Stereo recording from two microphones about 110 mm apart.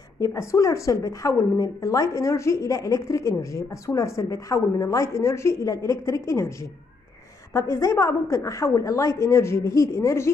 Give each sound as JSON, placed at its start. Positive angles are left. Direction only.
{"t": 0.2, "sound": "a woman's voice", "side_deg": 25}
{"t": 7.5, "sound": "a woman's voice", "side_deg": 25}